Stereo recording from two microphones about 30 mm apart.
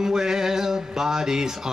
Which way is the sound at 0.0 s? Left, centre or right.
Centre.